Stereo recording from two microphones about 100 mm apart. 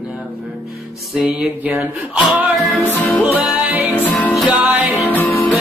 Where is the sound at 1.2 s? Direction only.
15° right (ahead or behind).